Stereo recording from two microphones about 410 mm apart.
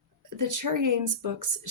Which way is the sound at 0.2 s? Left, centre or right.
Right.